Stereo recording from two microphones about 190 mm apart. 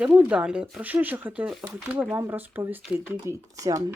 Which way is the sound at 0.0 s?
10° right (ahead or behind).